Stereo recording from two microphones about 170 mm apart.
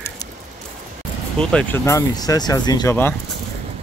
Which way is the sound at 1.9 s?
20° left (ahead or behind).